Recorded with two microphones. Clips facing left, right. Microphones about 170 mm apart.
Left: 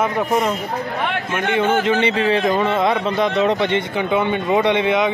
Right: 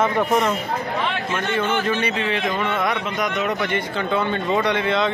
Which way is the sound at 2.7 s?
30° left (ahead or behind).